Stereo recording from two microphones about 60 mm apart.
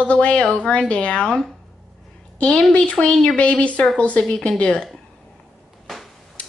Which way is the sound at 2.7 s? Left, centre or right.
Centre.